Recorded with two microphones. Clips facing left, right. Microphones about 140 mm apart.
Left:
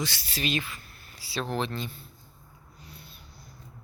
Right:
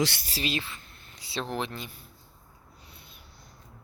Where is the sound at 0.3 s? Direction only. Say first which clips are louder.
Left 1 dB; 30° right (ahead or behind); by 2.0 s 15° right (ahead or behind).